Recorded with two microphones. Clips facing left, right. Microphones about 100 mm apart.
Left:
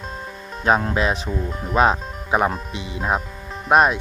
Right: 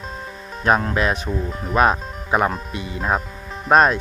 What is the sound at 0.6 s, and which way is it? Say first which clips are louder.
Speech: even; 20° left (ahead or behind).